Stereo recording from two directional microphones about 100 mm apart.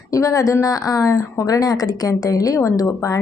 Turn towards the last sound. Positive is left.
turn(degrees=35)  # may be behind; listen again after turning